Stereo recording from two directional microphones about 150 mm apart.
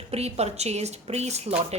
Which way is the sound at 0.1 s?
45° right (ahead or behind).